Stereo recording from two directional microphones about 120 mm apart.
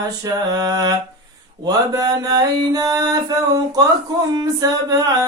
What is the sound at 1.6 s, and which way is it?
Mantra, 30° right (ahead or behind).